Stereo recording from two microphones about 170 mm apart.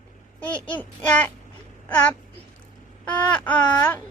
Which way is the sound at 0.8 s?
10° left (ahead or behind).